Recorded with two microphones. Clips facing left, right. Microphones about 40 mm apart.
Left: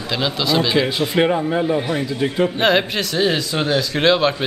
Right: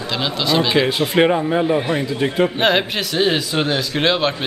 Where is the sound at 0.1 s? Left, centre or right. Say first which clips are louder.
Even; centre; by 2.6 s right.